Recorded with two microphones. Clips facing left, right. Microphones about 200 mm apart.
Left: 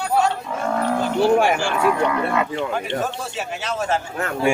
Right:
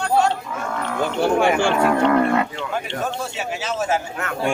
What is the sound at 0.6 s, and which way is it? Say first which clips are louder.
Speech: left 6 dB; 35° left (ahead or behind).